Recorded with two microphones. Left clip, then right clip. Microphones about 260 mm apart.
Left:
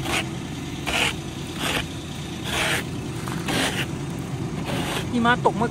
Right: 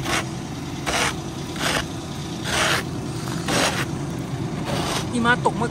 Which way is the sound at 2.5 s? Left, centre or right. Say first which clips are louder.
Right 3 dB; right.